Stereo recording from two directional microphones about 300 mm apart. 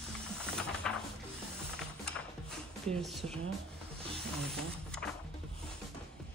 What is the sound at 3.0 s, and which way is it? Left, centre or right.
Speech, centre.